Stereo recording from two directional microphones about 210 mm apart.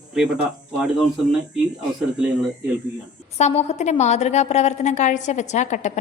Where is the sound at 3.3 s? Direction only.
30° left (ahead or behind).